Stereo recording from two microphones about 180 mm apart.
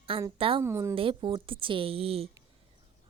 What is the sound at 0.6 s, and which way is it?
Speech, 15° right (ahead or behind).